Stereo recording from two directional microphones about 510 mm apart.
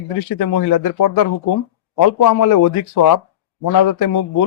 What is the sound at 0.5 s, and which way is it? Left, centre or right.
A man's voice, left.